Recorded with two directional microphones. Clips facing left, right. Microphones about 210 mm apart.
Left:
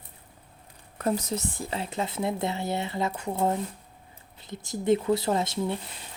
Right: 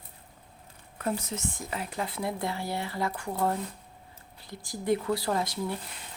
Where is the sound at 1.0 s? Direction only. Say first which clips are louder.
Left 4 dB; 40° left (ahead or behind).